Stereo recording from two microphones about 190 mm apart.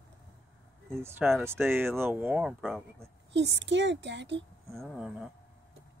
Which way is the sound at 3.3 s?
70° right (ahead or behind).